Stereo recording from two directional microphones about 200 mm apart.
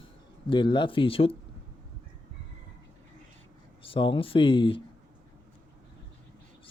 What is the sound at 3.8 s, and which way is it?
Speech, 25° left (ahead or behind).